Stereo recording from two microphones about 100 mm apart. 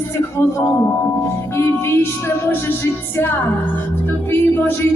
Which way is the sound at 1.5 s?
25° left (ahead or behind).